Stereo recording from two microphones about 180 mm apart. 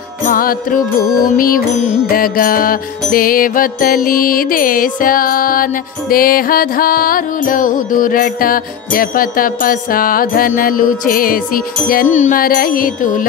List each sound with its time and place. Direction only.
0.3 s music: 50° left (ahead or behind)